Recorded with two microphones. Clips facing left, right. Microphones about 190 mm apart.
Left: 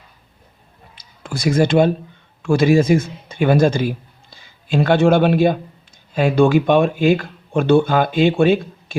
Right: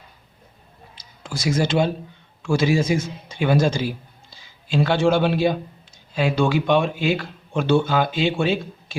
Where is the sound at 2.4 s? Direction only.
55° left (ahead or behind).